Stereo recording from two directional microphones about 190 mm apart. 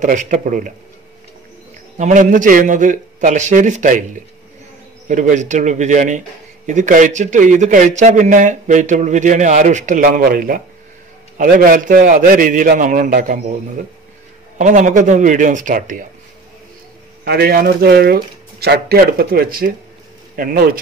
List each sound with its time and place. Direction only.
0.0 s speech: 40° right (ahead or behind)
2.0 s speech: 40° right (ahead or behind)
14.6 s speech: 40° right (ahead or behind)
17.2 s speech: 55° right (ahead or behind)